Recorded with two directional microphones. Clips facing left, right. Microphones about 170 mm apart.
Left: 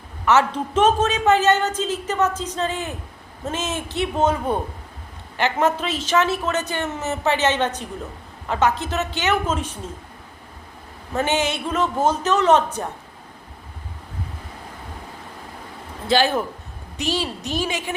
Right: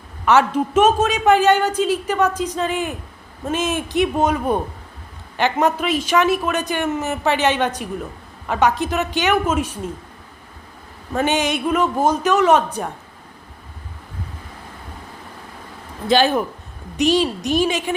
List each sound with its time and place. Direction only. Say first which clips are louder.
0.3 s a man's voice: right 3 dB; 15° right (ahead or behind)
11.1 s a man's voice: right 2 dB; 15° right (ahead or behind)
16.0 s a man's voice: right 3 dB; 20° right (ahead or behind)